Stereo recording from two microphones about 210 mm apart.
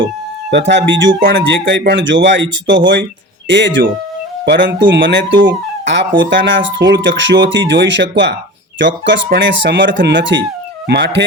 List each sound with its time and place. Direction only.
0.5 s speech: 55° right (ahead or behind)
4.9 s speech: 60° right (ahead or behind)